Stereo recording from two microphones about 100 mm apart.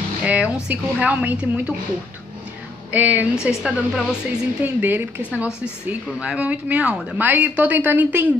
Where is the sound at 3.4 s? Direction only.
5° right (ahead or behind).